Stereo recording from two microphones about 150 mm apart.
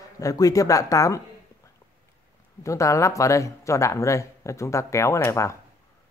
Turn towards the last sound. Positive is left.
turn(degrees=20)  # may be behind; listen again after turning